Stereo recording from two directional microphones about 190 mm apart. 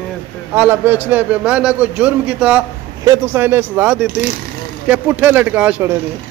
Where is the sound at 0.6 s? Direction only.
10° right (ahead or behind).